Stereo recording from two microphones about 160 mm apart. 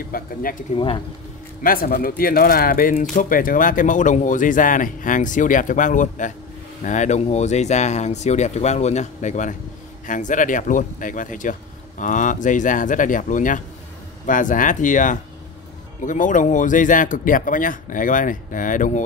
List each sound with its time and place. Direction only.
0.1 s speech: 65° left (ahead or behind)
0.7 s speech: 35° left (ahead or behind)
1.6 s speech: 65° left (ahead or behind)